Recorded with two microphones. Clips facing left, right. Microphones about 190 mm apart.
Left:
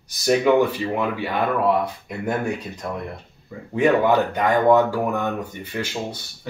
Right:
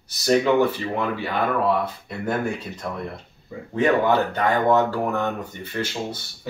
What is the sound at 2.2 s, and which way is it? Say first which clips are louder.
Speech: left 1 dB; 15° left (ahead or behind).